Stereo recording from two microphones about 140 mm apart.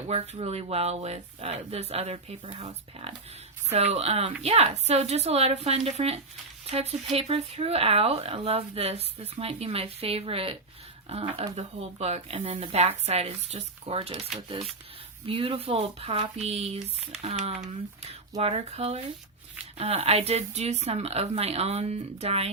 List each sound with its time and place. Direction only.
0.1 s speech: 45° right (ahead or behind)
15.3 s speech: 40° right (ahead or behind)